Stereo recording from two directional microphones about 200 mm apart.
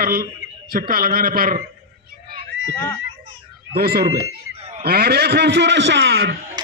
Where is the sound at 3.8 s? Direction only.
50° right (ahead or behind).